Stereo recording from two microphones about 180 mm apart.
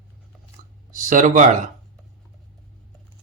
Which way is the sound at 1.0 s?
45° right (ahead or behind).